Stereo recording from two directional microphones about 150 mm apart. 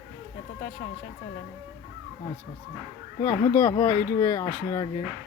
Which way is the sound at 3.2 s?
15° left (ahead or behind).